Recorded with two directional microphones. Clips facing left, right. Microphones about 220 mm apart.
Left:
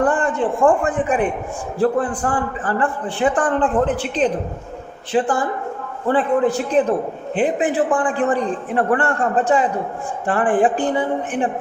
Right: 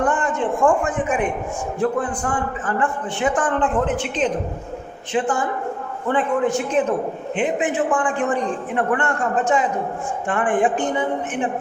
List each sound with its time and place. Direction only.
0.0 s a man's voice: 35° left (ahead or behind)